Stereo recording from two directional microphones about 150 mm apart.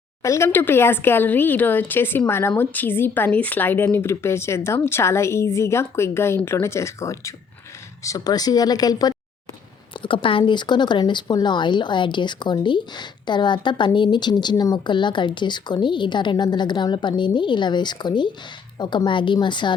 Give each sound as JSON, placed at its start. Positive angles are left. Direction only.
{"t": 0.2, "sound": "speech", "side_deg": 20}